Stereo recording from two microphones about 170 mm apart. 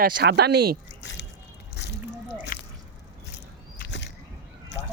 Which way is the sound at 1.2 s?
90° left.